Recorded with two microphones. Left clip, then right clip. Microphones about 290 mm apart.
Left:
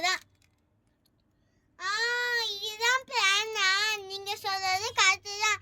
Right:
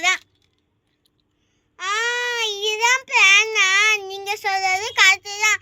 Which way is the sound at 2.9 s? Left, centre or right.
Centre.